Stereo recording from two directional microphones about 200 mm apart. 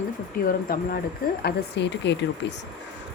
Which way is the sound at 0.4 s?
45° left (ahead or behind).